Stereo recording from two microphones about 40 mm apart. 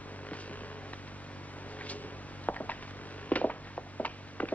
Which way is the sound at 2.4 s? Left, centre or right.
Left.